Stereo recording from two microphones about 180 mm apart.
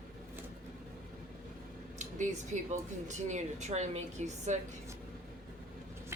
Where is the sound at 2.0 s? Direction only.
40° right (ahead or behind).